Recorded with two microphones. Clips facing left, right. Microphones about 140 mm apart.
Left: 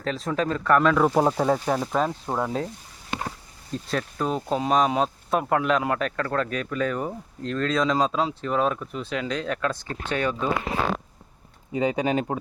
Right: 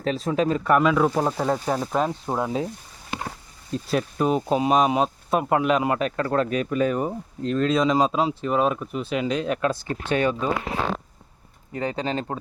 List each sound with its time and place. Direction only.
0.3 s speech: 15° right (ahead or behind)
3.8 s speech: 15° right (ahead or behind)
10.1 s speech: 25° right (ahead or behind)
11.7 s speech: 15° left (ahead or behind)